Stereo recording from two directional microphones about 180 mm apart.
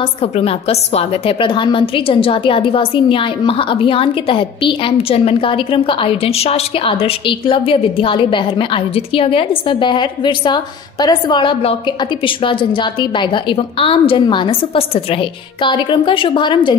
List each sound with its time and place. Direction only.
0.0 s a woman's voice: 35° left (ahead or behind)